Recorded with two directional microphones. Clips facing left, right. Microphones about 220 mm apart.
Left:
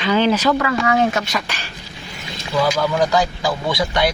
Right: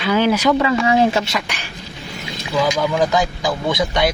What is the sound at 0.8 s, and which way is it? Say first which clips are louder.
Speech: right 1 dB; 30° right (ahead or behind).